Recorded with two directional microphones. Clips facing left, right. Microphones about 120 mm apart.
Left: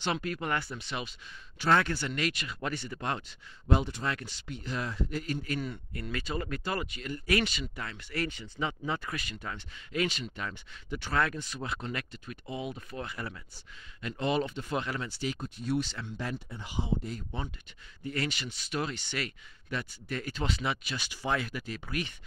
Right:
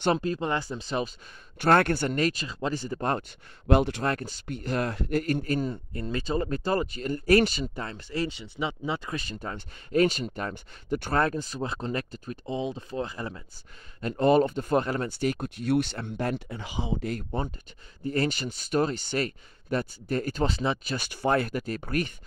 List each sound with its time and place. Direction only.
0.1 s speech: 30° right (ahead or behind)
1.6 s speech: 55° right (ahead or behind)
3.6 s speech: 65° right (ahead or behind)
4.1 s speech: 45° right (ahead or behind)
5.5 s speech: 40° right (ahead or behind)
5.9 s speech: 30° right (ahead or behind)
8.1 s speech: 20° right (ahead or behind)
14.0 s speech: 45° right (ahead or behind); by 17.2 s 85° right
18.0 s speech: 40° right (ahead or behind)
20.9 s speech: 50° right (ahead or behind)